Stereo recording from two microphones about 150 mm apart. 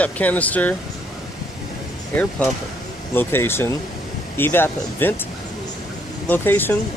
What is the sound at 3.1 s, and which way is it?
Speech, 15° left (ahead or behind).